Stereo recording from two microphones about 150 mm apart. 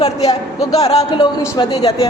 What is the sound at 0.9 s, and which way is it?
Speech, 45° left (ahead or behind).